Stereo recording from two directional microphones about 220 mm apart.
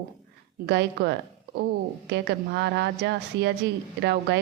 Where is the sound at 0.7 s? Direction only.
50° right (ahead or behind).